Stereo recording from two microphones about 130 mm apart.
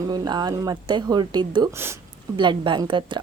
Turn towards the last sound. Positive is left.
turn(degrees=-35)  # may be behind; listen again after turning